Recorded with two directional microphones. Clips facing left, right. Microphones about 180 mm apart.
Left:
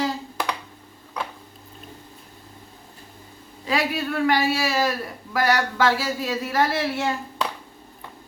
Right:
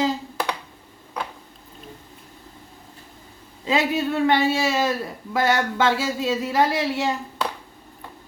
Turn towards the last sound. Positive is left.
turn(degrees=-15)  # may be behind; listen again after turning